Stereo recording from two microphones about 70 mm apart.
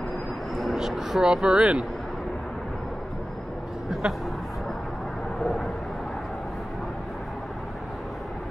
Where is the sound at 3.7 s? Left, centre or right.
Centre.